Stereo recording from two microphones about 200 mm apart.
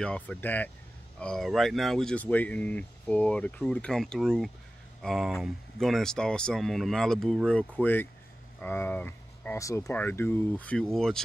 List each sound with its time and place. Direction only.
0.0 s speech: 5° left (ahead or behind)